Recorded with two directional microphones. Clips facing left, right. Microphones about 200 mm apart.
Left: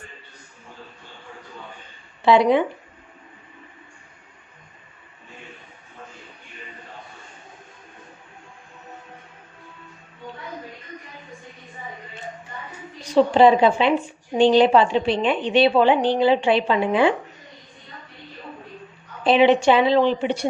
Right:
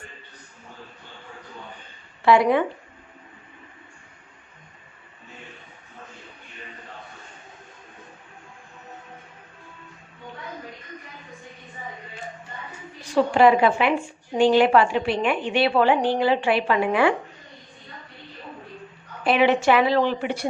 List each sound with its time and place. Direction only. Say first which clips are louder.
2.2 s a woman's voice: left 2 dB; 20° left (ahead or behind)
13.0 s a woman's voice: left 3 dB; 20° left (ahead or behind)
19.2 s a woman's voice: left 4 dB; 20° left (ahead or behind)